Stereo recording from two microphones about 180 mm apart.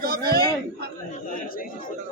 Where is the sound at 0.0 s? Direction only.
55° right (ahead or behind).